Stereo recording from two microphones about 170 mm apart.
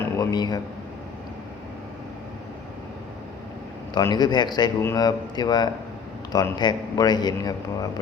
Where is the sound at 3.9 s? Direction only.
25° left (ahead or behind).